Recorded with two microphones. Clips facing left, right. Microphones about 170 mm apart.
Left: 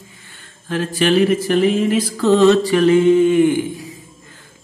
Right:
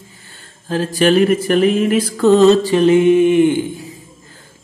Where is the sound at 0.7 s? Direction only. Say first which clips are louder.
Right 3 dB; 40° right (ahead or behind); by 2.4 s 55° right (ahead or behind).